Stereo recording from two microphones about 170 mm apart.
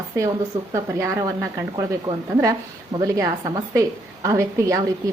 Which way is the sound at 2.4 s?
20° right (ahead or behind).